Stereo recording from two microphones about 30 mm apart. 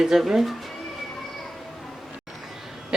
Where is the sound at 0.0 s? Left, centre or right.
Centre.